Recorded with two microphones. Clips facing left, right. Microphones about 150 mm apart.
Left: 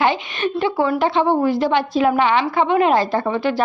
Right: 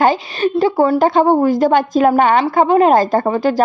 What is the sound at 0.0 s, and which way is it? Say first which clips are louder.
A woman's voice: right 5 dB; 40° right (ahead or behind).